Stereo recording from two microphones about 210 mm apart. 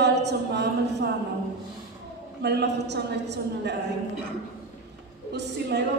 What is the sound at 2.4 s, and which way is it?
A woman's voice, 55° right (ahead or behind).